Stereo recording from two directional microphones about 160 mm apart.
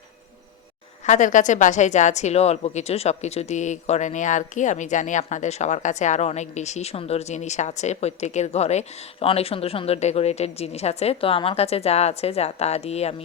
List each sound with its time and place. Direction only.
1.0 s a woman's voice: 50° left (ahead or behind)